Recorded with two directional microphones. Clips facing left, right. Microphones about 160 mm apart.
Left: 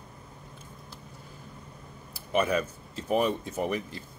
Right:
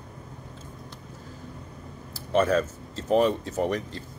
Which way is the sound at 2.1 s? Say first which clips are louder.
Right 4 dB; 10° left (ahead or behind).